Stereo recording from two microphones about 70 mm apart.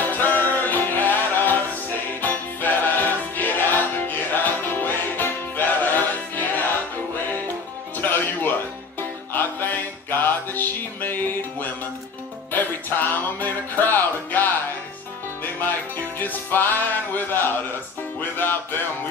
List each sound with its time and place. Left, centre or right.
0.0 s music: left
7.9 s music: left
15.6 s music: left